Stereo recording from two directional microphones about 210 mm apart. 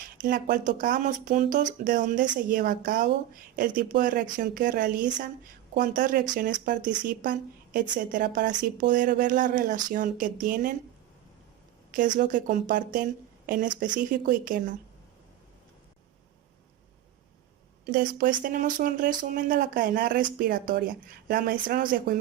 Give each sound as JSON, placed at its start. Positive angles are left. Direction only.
{"t": 0.0, "sound": "a sound", "side_deg": -40}
{"t": 0.5, "sound": "speech", "side_deg": -40}
{"t": 11.9, "sound": "speech", "side_deg": -40}
{"t": 17.8, "sound": "speech", "side_deg": -40}